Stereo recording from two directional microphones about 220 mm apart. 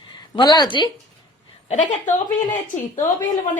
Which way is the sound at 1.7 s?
35° left (ahead or behind).